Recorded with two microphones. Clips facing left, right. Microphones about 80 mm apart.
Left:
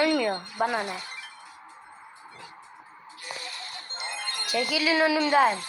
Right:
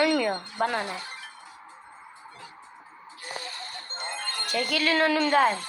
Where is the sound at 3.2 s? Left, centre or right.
Right.